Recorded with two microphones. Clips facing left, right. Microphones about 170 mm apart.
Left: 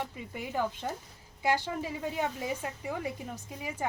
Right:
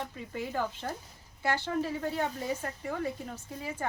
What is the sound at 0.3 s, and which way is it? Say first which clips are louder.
Speech: left 1 dB; 15° left (ahead or behind).